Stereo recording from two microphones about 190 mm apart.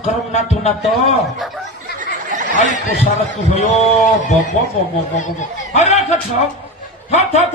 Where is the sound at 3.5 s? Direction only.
40° left (ahead or behind).